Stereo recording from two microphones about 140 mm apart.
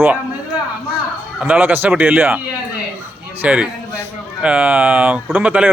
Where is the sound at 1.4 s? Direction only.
10° right (ahead or behind).